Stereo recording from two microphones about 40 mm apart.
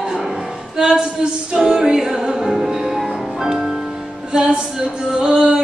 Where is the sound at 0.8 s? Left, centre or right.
Right.